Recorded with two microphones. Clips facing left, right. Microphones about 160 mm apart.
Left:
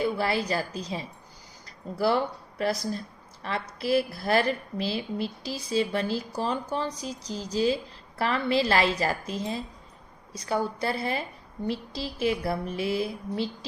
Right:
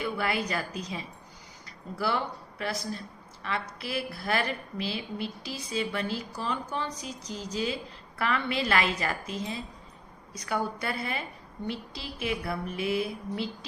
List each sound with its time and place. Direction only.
0.0 s a woman's voice: 35° left (ahead or behind)